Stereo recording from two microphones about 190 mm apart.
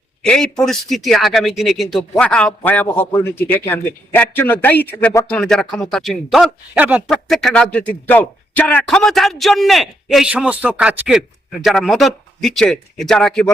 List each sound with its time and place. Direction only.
0.2 s a man's voice: 5° left (ahead or behind)
7.1 s a man's voice: 5° left (ahead or behind)